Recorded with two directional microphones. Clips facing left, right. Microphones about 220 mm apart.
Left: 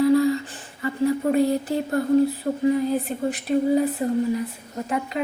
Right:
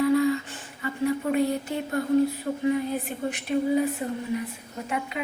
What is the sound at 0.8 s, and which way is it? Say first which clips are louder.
Speech: left 4 dB; 35° left (ahead or behind).